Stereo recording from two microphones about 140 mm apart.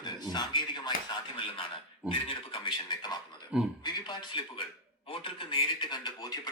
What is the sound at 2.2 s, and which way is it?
A man's voice, 40° left (ahead or behind).